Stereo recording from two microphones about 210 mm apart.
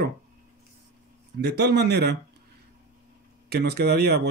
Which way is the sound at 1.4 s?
55° right (ahead or behind).